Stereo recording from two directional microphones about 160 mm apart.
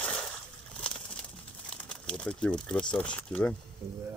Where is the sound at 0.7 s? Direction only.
5° left (ahead or behind).